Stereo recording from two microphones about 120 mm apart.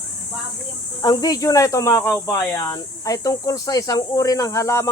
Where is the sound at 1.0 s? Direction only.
35° left (ahead or behind).